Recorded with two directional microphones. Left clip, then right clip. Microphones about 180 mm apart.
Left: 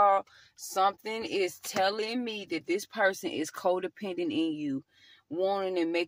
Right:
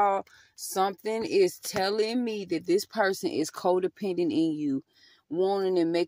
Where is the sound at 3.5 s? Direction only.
40° right (ahead or behind).